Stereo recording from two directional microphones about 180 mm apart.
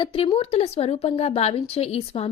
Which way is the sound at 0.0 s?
30° left (ahead or behind).